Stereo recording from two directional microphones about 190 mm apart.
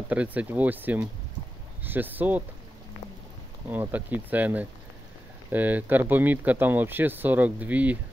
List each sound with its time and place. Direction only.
0.1 s speech: 10° right (ahead or behind)
3.6 s speech: 10° right (ahead or behind)